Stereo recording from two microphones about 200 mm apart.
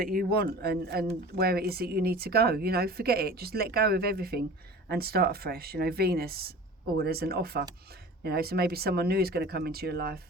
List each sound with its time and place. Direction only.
0.0 s speech: 45° right (ahead or behind)